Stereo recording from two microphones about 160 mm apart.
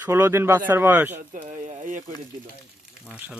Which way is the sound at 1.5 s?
50° right (ahead or behind).